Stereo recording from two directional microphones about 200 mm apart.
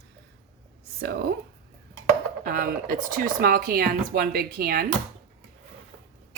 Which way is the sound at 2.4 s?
45° right (ahead or behind).